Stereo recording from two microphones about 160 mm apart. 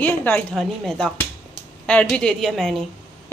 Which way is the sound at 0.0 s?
10° left (ahead or behind).